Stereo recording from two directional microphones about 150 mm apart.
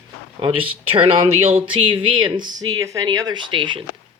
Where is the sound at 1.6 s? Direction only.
35° right (ahead or behind).